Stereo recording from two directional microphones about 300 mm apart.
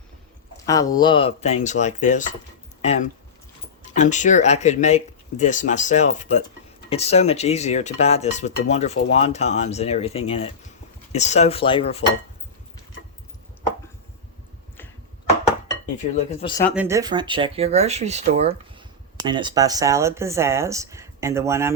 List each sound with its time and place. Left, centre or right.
0.6 s speech: centre
16.1 s speech: centre
16.6 s speech: centre